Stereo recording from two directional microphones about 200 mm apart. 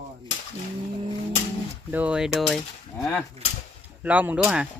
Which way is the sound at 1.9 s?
5° right (ahead or behind).